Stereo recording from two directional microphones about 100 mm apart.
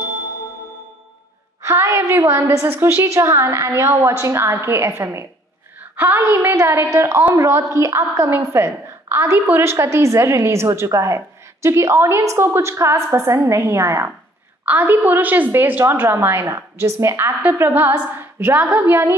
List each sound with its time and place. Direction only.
1.6 s a woman's voice: 25° right (ahead or behind)
14.6 s a woman's voice: 15° right (ahead or behind)
17.4 s a woman's voice: 15° right (ahead or behind)